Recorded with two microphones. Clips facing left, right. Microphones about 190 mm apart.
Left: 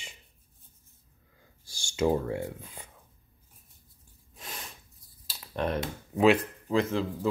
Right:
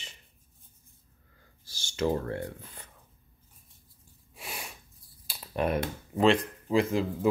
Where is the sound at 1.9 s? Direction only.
15° left (ahead or behind).